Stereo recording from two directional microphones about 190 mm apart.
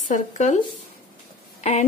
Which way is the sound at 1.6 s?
35° left (ahead or behind).